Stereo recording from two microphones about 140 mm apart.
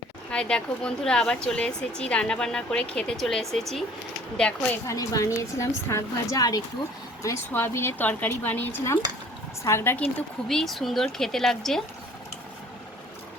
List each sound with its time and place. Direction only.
0.3 s a woman's voice: 5° left (ahead or behind)
4.9 s a woman's voice: 25° left (ahead or behind); by 11.8 s 5° left (ahead or behind)